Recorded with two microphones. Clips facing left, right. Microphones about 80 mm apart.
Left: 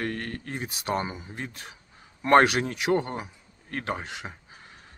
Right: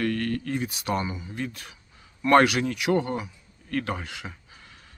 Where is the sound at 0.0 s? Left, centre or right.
Left.